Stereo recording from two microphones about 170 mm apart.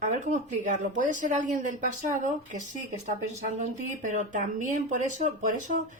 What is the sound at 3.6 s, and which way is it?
Speech, 45° right (ahead or behind).